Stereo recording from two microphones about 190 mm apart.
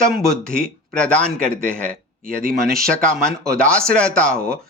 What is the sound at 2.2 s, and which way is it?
Speech, 45° right (ahead or behind).